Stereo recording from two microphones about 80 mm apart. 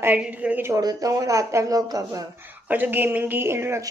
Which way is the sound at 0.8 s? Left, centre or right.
Right.